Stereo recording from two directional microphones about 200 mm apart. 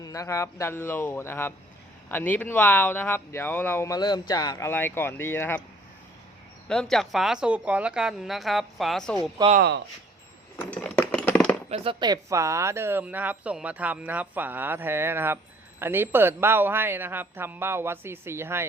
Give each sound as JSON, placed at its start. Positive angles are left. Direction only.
{"t": 0.0, "sound": "speech", "side_deg": 15}
{"t": 6.9, "sound": "speech", "side_deg": 0}
{"t": 9.6, "sound": "speech", "side_deg": -60}
{"t": 10.6, "sound": "typing", "side_deg": 5}
{"t": 11.7, "sound": "speech", "side_deg": -30}